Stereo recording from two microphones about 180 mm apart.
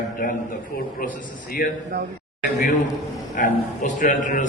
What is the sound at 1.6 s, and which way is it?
Speech, 55° left (ahead or behind).